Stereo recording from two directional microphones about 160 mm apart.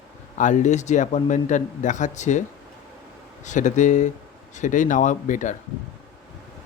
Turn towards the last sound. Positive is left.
turn(degrees=50)  # may be behind; listen again after turning